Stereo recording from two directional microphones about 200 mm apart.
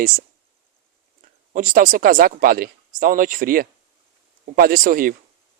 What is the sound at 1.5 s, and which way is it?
Speech, 40° right (ahead or behind).